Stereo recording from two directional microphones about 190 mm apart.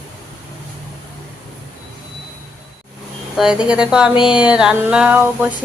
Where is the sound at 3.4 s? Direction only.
5° right (ahead or behind).